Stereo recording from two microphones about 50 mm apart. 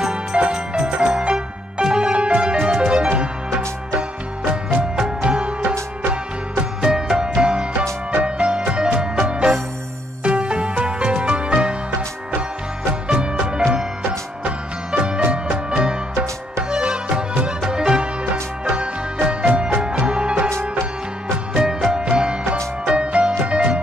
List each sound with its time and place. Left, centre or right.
0.0 s music: centre
4.9 s music: centre
6.6 s music: centre
13.1 s music: centre
21.5 s music: centre